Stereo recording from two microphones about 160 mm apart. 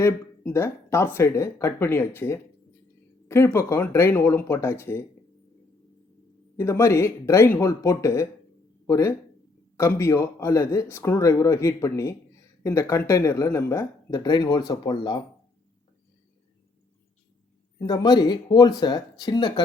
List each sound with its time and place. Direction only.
0.0 s speech: 15° left (ahead or behind)
6.6 s speech: 20° left (ahead or behind)
17.7 s speech: 25° left (ahead or behind)